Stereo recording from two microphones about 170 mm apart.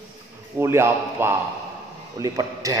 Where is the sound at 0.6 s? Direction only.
15° right (ahead or behind).